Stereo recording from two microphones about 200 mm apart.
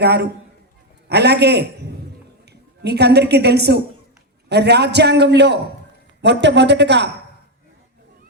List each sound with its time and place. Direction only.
0.0 s a man's voice: 55° right (ahead or behind)